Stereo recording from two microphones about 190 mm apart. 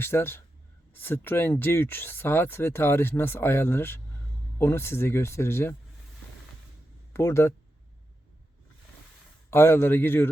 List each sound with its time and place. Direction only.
0.0 s speech: 10° left (ahead or behind)
7.1 s speech: 15° left (ahead or behind)
9.5 s speech: 10° left (ahead or behind)